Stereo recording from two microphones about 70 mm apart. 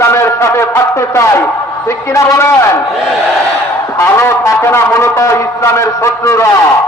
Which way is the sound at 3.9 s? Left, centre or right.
Left.